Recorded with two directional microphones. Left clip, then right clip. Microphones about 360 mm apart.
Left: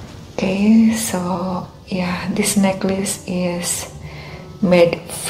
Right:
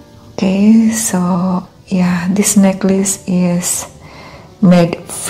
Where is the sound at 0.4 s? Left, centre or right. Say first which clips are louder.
Right 4 dB; right.